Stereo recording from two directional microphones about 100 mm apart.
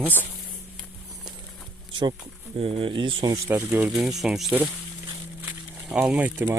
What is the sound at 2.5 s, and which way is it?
Speech, 75° right (ahead or behind).